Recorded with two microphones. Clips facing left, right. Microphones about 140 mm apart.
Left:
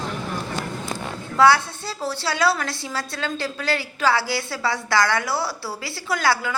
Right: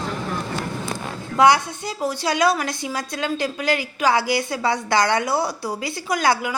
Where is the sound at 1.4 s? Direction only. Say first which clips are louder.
Right 1 dB; 15° right (ahead or behind).